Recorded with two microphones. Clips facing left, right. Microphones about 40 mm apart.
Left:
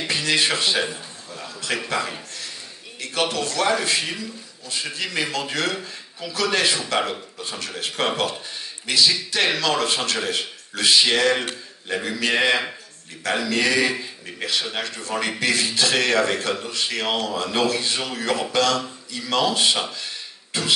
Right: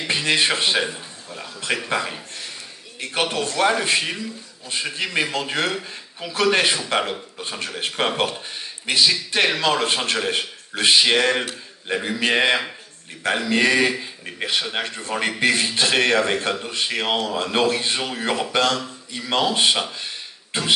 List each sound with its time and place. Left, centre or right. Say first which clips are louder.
0.0 s a man's voice: right 1 dB; right
3.0 s a man's voice: right 1 dB; right